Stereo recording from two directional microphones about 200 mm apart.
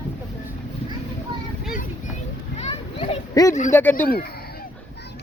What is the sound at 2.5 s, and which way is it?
Children playing, 30° left (ahead or behind).